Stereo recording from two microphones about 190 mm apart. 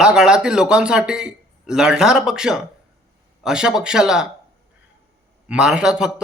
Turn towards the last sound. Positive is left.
turn(degrees=-5)  # may be behind; listen again after turning